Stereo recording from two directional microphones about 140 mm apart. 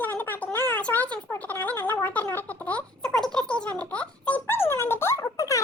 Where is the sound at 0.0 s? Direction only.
10° left (ahead or behind).